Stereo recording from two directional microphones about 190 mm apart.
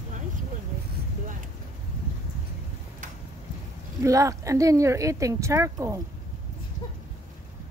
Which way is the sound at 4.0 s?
15° right (ahead or behind).